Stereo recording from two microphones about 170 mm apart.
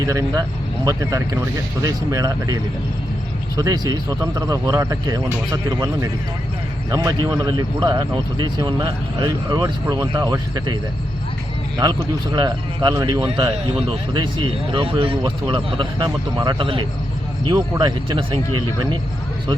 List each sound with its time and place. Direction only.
0.0 s speech: 20° right (ahead or behind)
3.6 s speech: 20° right (ahead or behind)
11.8 s speech: 25° right (ahead or behind)
14.7 s speech: 30° right (ahead or behind)